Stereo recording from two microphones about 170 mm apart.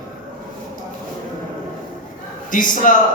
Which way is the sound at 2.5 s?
50° left (ahead or behind).